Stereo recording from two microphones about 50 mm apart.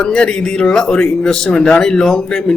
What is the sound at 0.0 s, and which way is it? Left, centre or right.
A man's voice, centre.